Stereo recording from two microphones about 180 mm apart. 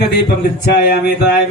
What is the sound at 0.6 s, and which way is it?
Speech, 65° left (ahead or behind).